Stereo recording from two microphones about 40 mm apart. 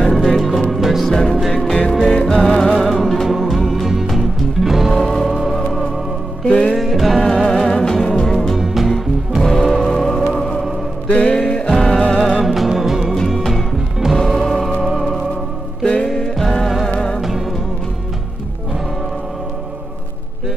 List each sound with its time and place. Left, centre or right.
0.1 s music: centre
1.1 s music: centre
4.9 s music: centre
6.4 s music: centre
7.2 s music: centre
8.5 s music: centre
9.4 s music: centre
12.2 s music: centre
12.4 s music: centre
13.4 s music: centre
15.8 s music: centre
17.2 s music: centre